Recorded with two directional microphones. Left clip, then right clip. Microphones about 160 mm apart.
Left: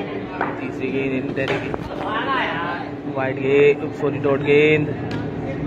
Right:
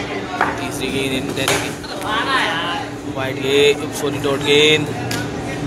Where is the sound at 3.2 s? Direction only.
15° right (ahead or behind).